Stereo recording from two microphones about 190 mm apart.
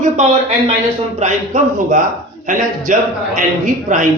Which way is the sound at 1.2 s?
40° right (ahead or behind).